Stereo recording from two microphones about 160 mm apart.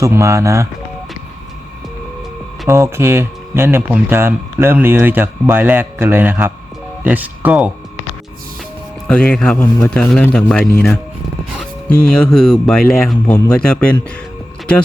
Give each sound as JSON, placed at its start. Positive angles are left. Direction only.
{"t": 0.0, "sound": "speech", "side_deg": -20}
{"t": 2.6, "sound": "speech", "side_deg": -15}
{"t": 9.0, "sound": "a man's voice", "side_deg": 5}